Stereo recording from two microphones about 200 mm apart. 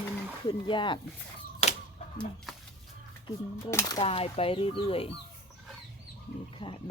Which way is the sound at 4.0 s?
30° left (ahead or behind).